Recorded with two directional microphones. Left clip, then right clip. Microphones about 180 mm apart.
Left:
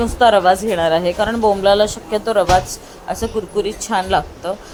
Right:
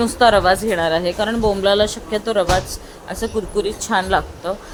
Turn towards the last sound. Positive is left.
turn(degrees=0)  # may be behind; listen again after turning